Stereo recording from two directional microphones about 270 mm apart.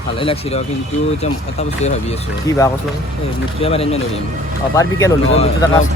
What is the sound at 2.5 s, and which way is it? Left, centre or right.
Speech, centre.